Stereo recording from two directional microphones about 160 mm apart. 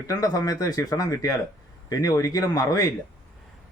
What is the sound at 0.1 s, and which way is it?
A man's voice, 25° left (ahead or behind).